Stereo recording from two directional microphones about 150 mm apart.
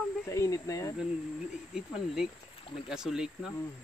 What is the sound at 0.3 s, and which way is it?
Speech, 20° left (ahead or behind).